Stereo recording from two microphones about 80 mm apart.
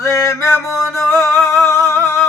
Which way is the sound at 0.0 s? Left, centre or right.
Left.